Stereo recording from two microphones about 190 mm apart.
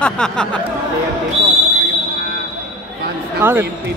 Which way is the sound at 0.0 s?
5° left (ahead or behind).